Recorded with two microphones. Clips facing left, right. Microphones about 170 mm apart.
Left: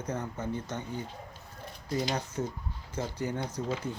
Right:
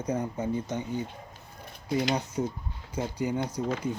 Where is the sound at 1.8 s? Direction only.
65° right (ahead or behind).